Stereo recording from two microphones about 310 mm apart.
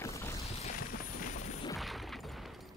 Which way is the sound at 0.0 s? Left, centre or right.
Centre.